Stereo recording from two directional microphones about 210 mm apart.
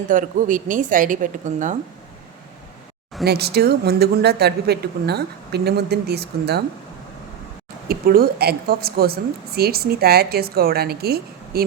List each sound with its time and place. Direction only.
0.1 s speech: 40° right (ahead or behind)
3.2 s a woman's voice: 50° right (ahead or behind)
7.9 s a woman's voice: 45° right (ahead or behind)